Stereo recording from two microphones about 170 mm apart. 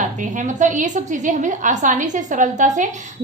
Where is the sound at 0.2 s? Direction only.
50° right (ahead or behind).